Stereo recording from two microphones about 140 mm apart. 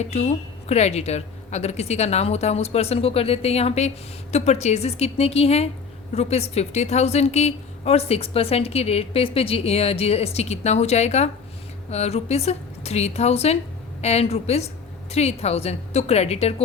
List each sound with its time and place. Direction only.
0.0 s a woman's voice: 50° left (ahead or behind)